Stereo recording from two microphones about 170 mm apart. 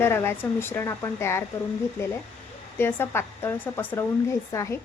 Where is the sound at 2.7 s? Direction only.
15° left (ahead or behind).